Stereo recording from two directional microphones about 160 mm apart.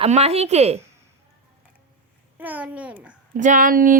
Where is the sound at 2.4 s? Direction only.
10° right (ahead or behind).